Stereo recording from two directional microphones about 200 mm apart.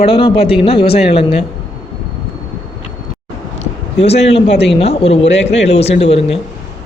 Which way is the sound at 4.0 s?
30° left (ahead or behind).